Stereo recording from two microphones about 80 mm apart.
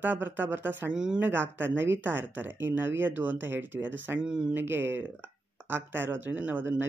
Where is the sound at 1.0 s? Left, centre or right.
Centre.